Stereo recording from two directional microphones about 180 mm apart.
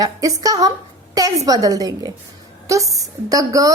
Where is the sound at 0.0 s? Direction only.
20° right (ahead or behind).